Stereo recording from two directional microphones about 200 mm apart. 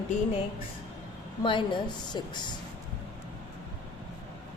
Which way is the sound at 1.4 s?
25° left (ahead or behind).